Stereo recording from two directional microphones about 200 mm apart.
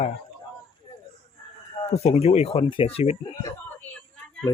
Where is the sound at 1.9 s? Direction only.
30° left (ahead or behind).